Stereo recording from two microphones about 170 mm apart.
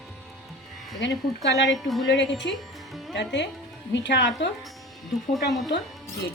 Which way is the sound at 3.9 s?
90° left.